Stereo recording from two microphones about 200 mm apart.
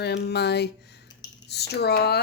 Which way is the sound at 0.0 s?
55° left (ahead or behind).